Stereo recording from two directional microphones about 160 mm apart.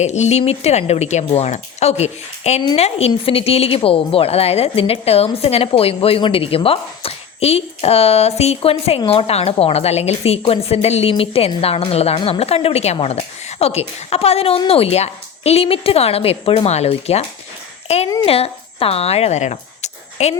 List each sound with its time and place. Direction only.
0.0 s a woman's voice: 45° left (ahead or behind)